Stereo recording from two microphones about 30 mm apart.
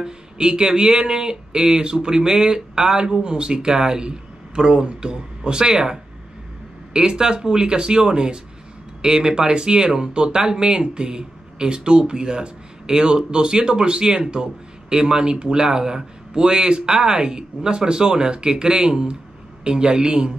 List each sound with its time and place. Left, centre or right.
0.0 s speech: right